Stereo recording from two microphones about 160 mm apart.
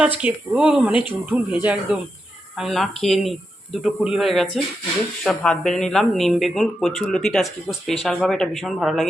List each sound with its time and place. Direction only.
0.2 s speech: 10° right (ahead or behind)